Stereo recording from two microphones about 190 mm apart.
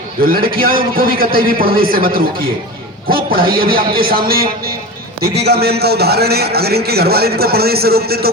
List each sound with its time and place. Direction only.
0.3 s a man's voice: 50° right (ahead or behind)